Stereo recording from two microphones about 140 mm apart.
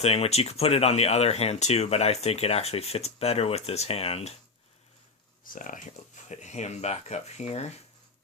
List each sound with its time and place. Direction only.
0.0 s speech: 45° left (ahead or behind)
5.5 s speech: 70° left (ahead or behind)
6.2 s speech: 55° left (ahead or behind)